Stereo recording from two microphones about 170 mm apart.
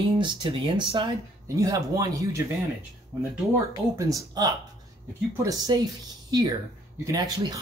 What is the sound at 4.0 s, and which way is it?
Speech, 20° right (ahead or behind).